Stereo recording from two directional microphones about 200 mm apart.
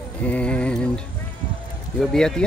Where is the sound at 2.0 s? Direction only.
Centre (ahead or behind).